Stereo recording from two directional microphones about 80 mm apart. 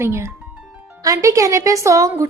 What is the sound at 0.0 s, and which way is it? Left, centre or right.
A woman's voice, right.